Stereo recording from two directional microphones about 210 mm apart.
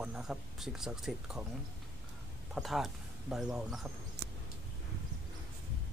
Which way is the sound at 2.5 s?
Centre (ahead or behind).